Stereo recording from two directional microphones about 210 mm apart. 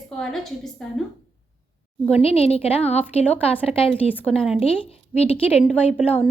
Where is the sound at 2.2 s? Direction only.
30° left (ahead or behind).